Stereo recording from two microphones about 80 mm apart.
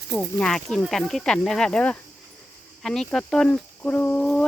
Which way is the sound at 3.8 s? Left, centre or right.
Left.